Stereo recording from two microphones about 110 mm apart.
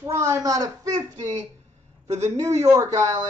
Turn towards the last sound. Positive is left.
turn(degrees=-30)  # may be behind; listen again after turning